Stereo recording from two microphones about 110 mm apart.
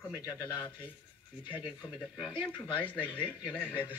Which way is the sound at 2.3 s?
50° left (ahead or behind).